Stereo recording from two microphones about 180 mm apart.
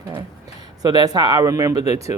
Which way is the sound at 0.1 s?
20° right (ahead or behind).